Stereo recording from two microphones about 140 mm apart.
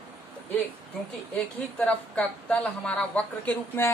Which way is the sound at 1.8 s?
10° left (ahead or behind).